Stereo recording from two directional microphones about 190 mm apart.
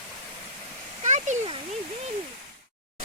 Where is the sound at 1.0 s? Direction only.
40° right (ahead or behind).